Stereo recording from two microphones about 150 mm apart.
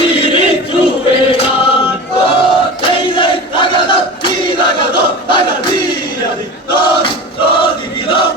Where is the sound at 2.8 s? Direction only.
35° left (ahead or behind).